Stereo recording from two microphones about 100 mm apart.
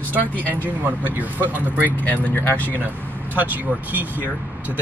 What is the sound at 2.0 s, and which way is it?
Speech, 15° left (ahead or behind).